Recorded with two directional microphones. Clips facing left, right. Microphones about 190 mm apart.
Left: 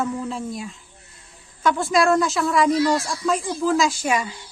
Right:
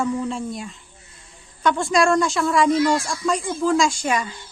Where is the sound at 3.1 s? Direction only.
Centre (ahead or behind).